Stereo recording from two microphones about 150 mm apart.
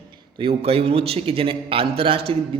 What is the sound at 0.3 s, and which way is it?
A man's voice, 40° right (ahead or behind).